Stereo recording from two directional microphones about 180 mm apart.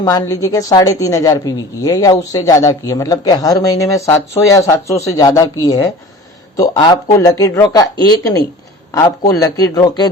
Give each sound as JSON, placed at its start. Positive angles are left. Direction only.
{"t": 0.0, "sound": "speech", "side_deg": 20}